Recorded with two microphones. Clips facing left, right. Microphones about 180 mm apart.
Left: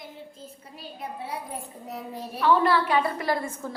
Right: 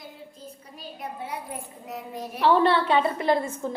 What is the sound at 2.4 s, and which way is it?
A woman's voice, 30° right (ahead or behind).